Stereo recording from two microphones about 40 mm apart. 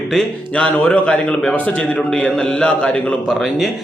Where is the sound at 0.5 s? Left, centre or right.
Left.